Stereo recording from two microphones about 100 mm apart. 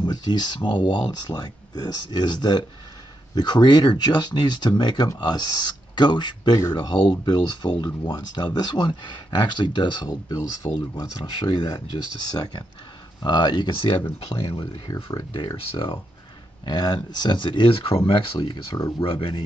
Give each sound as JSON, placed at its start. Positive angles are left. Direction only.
{"t": 0.0, "sound": "speech", "side_deg": 45}
{"t": 13.2, "sound": "speech", "side_deg": 50}
{"t": 14.2, "sound": "speech", "side_deg": 75}
{"t": 14.9, "sound": "speech", "side_deg": 35}
{"t": 15.5, "sound": "speech", "side_deg": 65}
{"t": 16.6, "sound": "speech", "side_deg": 45}
{"t": 18.8, "sound": "speech", "side_deg": 35}
{"t": 19.0, "sound": "speech", "side_deg": 60}